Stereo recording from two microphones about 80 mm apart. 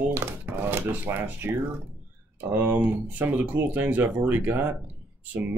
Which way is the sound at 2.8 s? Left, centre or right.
Right.